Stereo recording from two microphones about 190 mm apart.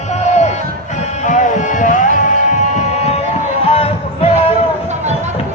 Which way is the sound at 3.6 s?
30° left (ahead or behind).